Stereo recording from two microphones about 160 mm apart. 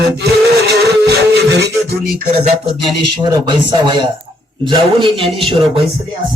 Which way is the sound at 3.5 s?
25° right (ahead or behind).